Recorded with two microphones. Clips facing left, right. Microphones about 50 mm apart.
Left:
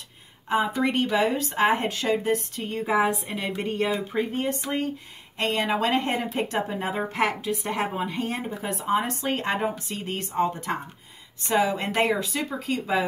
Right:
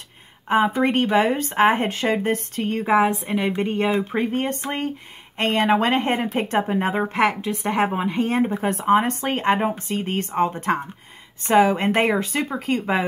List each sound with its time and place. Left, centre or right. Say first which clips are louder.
0.5 s speech: right 5 dB; right
8.4 s speech: right 9 dB; right